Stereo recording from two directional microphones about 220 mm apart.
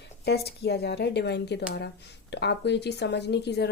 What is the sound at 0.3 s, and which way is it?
Speech, 45° left (ahead or behind).